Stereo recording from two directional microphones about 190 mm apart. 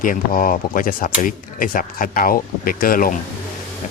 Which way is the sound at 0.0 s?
45° left (ahead or behind).